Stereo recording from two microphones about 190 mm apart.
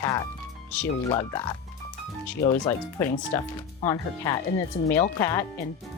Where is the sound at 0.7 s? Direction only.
5° left (ahead or behind).